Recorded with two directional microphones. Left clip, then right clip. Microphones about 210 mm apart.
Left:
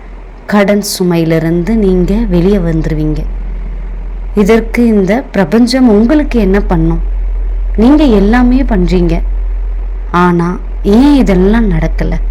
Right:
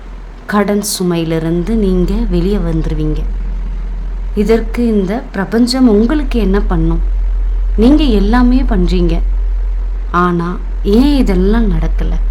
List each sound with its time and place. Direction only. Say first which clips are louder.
0.4 s a woman's voice: left 4 dB; 15° left (ahead or behind)
4.4 s a woman's voice: left 4 dB; 15° left (ahead or behind)